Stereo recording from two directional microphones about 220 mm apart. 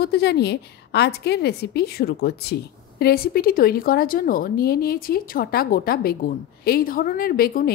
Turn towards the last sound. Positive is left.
turn(degrees=40)  # may be behind; listen again after turning